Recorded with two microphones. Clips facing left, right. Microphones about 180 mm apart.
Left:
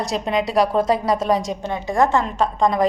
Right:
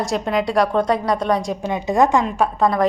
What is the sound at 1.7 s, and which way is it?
Speech, 15° right (ahead or behind).